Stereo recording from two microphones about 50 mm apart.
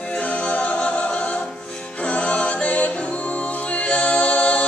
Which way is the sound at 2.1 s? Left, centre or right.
Left.